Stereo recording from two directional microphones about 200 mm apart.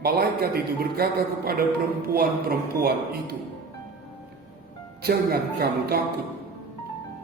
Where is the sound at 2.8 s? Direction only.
50° right (ahead or behind).